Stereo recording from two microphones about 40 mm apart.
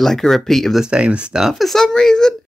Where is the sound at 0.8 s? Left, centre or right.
Right.